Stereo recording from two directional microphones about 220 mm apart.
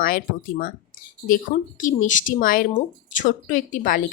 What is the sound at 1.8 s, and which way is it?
A woman's voice, 35° left (ahead or behind).